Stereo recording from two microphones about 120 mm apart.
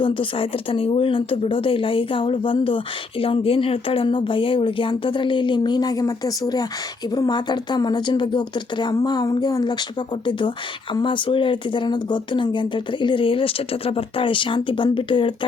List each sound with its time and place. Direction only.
0.0 s a woman's voice: 45° left (ahead or behind)